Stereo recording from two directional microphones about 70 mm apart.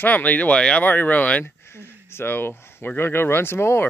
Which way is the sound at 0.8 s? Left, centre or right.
Left.